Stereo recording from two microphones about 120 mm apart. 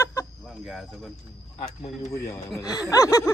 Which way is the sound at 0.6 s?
Centre (ahead or behind).